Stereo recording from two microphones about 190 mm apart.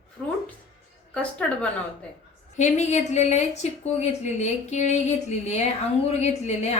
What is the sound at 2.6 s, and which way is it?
A woman's voice, 35° left (ahead or behind).